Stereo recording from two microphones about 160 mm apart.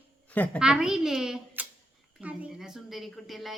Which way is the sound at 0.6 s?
5° right (ahead or behind).